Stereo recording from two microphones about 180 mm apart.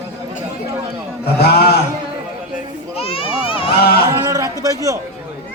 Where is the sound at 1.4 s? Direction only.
60° left (ahead or behind).